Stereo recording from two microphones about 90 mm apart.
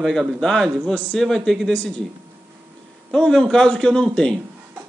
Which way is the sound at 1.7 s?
15° left (ahead or behind).